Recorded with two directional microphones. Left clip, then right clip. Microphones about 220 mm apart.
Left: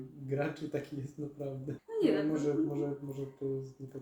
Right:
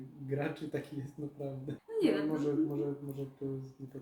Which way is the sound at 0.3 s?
10° left (ahead or behind).